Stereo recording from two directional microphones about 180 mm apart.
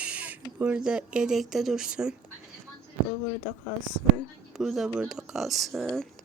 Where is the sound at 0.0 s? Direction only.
10° right (ahead or behind).